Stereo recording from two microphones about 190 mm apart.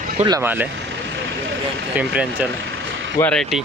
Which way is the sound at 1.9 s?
5° right (ahead or behind).